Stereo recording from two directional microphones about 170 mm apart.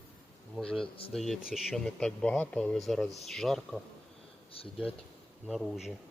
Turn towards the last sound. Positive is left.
turn(degrees=0)  # may be behind; listen again after turning